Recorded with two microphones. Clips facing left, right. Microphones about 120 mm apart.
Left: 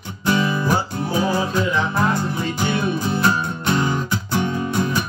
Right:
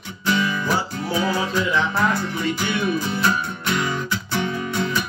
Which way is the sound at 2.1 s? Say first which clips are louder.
Left 1 dB; 25° left (ahead or behind).